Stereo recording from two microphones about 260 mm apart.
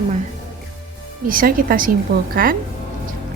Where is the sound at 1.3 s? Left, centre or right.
Right.